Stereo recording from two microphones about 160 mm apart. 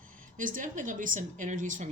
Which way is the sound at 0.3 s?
55° right (ahead or behind).